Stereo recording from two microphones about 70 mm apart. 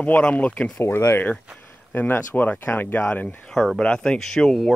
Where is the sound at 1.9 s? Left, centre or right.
Left.